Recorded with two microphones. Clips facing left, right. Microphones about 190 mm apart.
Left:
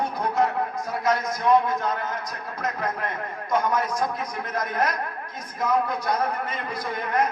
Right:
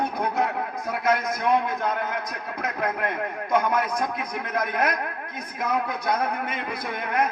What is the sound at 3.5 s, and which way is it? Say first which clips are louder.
A man's voice: even; 60° right (ahead or behind).